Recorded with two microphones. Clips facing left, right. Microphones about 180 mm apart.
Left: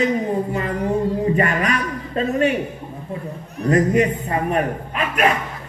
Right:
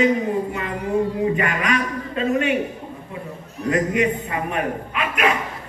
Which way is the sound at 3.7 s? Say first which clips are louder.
Left 3 dB; 40° left (ahead or behind).